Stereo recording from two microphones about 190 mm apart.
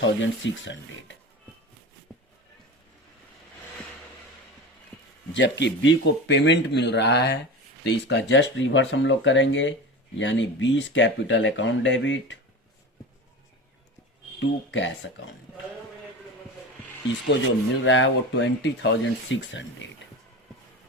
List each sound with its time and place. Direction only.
0.0 s speech: 75° left (ahead or behind)
5.3 s a man's voice: 70° left (ahead or behind)
14.3 s speech: 75° left (ahead or behind)
17.8 s speech: 85° left